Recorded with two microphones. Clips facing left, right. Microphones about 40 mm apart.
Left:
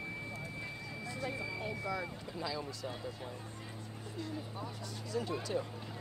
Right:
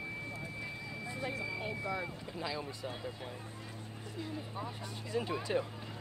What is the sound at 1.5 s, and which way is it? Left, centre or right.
Speech, centre.